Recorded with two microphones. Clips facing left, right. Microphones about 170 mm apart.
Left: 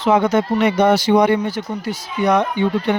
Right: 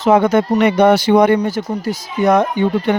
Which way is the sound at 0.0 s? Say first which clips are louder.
Right 3 dB; 50° right (ahead or behind).